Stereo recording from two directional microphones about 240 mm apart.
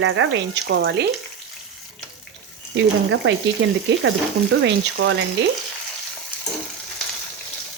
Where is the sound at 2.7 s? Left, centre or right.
Right.